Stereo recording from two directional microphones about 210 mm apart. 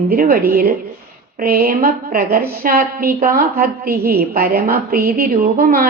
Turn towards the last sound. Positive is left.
turn(degrees=-40)  # may be behind; listen again after turning